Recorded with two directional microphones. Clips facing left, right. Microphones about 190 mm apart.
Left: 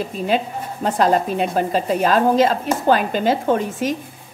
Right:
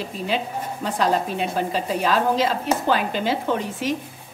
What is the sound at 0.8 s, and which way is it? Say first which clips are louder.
A woman's voice: left 5 dB; 50° left (ahead or behind).